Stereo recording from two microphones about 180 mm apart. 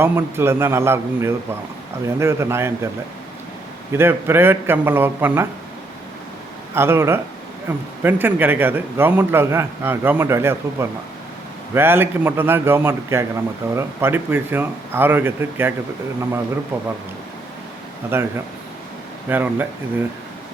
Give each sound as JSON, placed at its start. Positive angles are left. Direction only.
{"t": 0.0, "sound": "a man's voice", "side_deg": -15}
{"t": 3.9, "sound": "a man's voice", "side_deg": -15}
{"t": 6.7, "sound": "a man's voice", "side_deg": -15}
{"t": 18.1, "sound": "a man's voice", "side_deg": -10}
{"t": 19.3, "sound": "a man's voice", "side_deg": -10}